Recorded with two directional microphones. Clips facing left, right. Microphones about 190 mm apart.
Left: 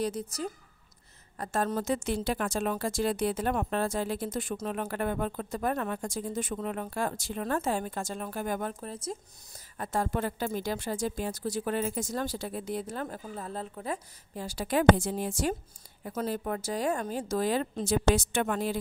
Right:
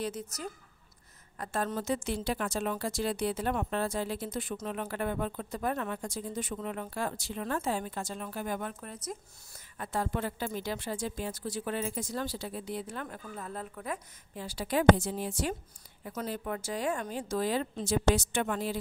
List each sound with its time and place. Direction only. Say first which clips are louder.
0.0 s a woman's voice: left 4 dB; 35° left (ahead or behind)
9.8 s a woman's voice: left 3 dB; 45° left (ahead or behind); by 14.0 s 30° left (ahead or behind)
14.3 s a woman's voice: left 2 dB; 45° left (ahead or behind)